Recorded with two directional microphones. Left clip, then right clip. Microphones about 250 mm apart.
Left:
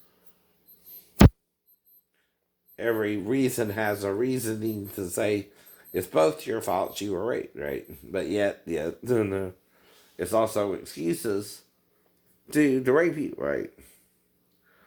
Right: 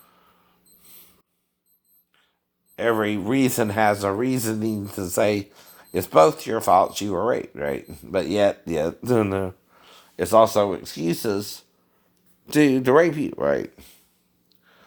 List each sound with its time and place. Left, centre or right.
2.7 s speech: right